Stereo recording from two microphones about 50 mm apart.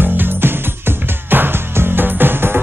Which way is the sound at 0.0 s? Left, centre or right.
Right.